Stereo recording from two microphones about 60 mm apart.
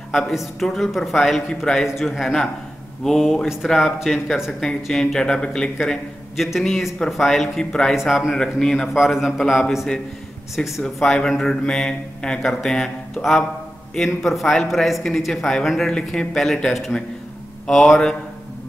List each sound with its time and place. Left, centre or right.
0.1 s speech: centre
5.8 s a man's voice: centre
7.9 s speech: centre
8.4 s speech: centre
8.9 s speech: centre
10.8 s speech: centre